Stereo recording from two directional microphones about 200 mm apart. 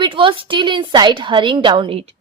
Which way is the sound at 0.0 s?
25° right (ahead or behind).